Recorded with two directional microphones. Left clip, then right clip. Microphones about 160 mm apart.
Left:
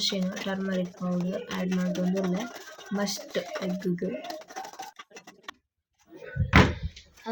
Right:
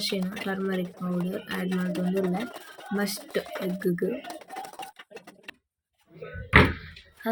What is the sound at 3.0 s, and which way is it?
Speech, 15° right (ahead or behind).